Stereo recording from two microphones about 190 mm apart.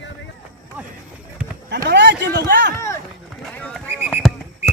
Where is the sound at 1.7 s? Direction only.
65° right (ahead or behind).